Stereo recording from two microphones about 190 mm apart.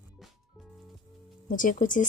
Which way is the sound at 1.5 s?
45° left (ahead or behind).